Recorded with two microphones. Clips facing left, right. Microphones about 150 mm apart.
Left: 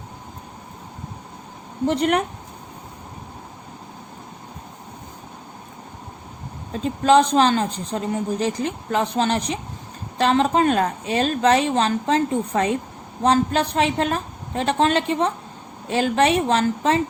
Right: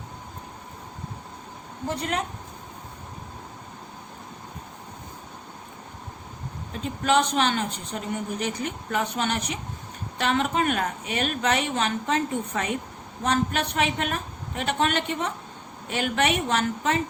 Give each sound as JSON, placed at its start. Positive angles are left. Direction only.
{"t": 2.0, "sound": "speech", "side_deg": 70}
{"t": 6.8, "sound": "speech", "side_deg": 35}